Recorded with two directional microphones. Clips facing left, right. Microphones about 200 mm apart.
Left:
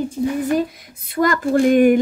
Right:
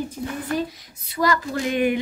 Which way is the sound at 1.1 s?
50° left (ahead or behind).